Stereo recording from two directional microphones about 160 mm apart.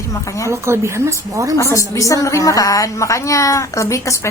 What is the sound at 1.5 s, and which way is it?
A woman's voice, 20° left (ahead or behind).